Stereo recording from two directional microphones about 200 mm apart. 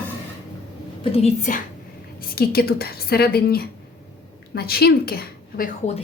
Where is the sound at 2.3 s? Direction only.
50° left (ahead or behind).